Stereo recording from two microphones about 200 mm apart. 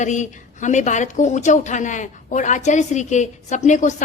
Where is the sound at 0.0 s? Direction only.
35° left (ahead or behind).